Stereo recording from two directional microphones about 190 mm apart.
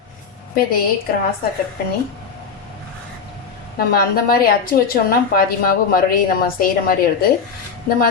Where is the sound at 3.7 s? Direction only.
50° left (ahead or behind).